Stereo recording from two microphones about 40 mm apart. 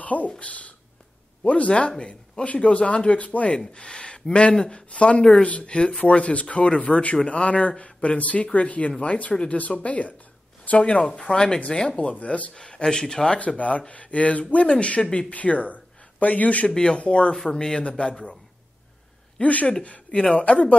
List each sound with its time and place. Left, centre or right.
0.0 s speech: left
5.8 s speech: left
6.0 s speech: left; by 12.0 s centre
12.0 s speech: left
12.5 s speech: left
13.6 s speech: left
16.6 s speech: left
19.4 s speech: left